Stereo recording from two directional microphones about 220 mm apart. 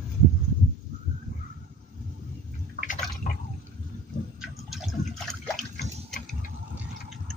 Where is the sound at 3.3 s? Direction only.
40° left (ahead or behind).